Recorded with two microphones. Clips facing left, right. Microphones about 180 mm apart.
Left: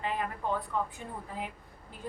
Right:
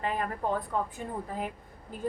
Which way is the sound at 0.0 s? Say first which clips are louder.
Right 3 dB; 45° right (ahead or behind).